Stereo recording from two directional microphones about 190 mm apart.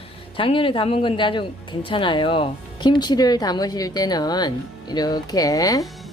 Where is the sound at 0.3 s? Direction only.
30° left (ahead or behind).